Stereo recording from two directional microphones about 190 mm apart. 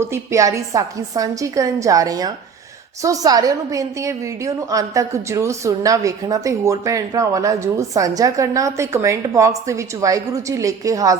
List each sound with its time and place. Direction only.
0.0 s a woman's voice: 15° right (ahead or behind)